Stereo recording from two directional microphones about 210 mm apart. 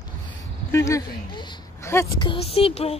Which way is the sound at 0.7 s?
15° left (ahead or behind).